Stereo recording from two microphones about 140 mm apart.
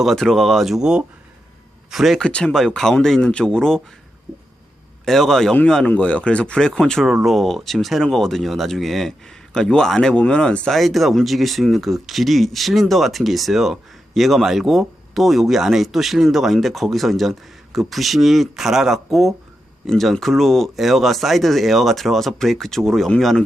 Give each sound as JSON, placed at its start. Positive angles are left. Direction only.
{"t": 0.0, "sound": "speech", "side_deg": 0}
{"t": 5.0, "sound": "speech", "side_deg": 0}